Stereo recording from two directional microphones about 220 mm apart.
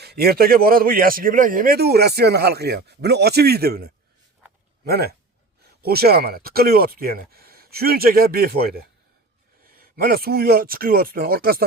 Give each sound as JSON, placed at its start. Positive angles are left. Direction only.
{"t": 0.0, "sound": "speech", "side_deg": -45}